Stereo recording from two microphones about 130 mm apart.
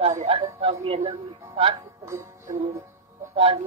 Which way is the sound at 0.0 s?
55° right (ahead or behind).